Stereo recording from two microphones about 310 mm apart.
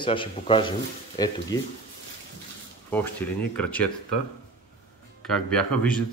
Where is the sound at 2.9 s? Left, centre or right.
Centre.